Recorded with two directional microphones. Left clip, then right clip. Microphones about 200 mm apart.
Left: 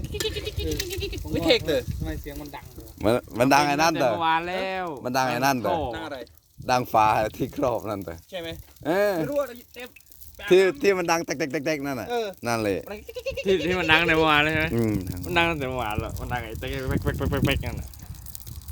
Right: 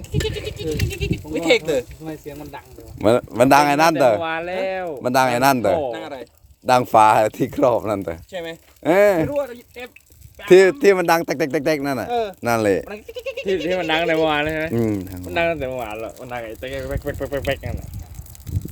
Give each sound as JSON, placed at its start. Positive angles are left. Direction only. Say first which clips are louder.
{"t": 0.4, "sound": "pigeon", "louder": "right 4 dB", "side_deg": -45}
{"t": 0.9, "sound": "speech", "louder": "right 4 dB", "side_deg": -45}
{"t": 3.0, "sound": "speech", "louder": "right 7 dB", "side_deg": -20}
{"t": 4.2, "sound": "speech", "louder": "right 1 dB", "side_deg": 45}
{"t": 5.0, "sound": "speech", "louder": "right 8 dB", "side_deg": -30}
{"t": 5.9, "sound": "speech", "louder": "right 4 dB", "side_deg": -35}
{"t": 6.7, "sound": "speech", "louder": "right 7 dB", "side_deg": -25}
{"t": 12.0, "sound": "speech", "louder": "right 6 dB", "side_deg": -15}
{"t": 13.4, "sound": "speech", "louder": "right 2 dB", "side_deg": 50}
{"t": 14.7, "sound": "speech", "louder": "right 4 dB", "side_deg": -15}
{"t": 15.3, "sound": "speech", "louder": "right 3 dB", "side_deg": 50}